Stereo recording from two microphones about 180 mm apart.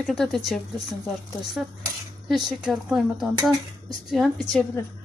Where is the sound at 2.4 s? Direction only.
Centre (ahead or behind).